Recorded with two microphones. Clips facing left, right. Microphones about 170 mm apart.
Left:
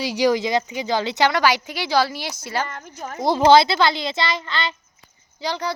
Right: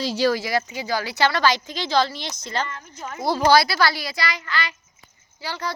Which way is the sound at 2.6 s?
55° left (ahead or behind).